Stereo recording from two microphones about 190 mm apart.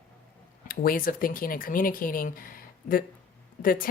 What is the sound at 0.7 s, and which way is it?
Speech, 50° left (ahead or behind).